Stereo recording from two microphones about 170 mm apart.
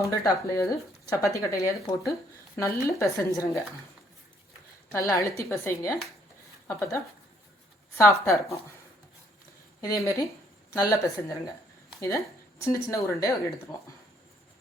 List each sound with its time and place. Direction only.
0.0 s speech: 20° left (ahead or behind)
4.9 s speech: 15° left (ahead or behind)
9.8 s speech: 20° left (ahead or behind)